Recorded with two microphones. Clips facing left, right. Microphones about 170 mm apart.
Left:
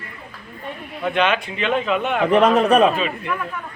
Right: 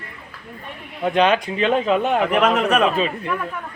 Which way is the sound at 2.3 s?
30° left (ahead or behind).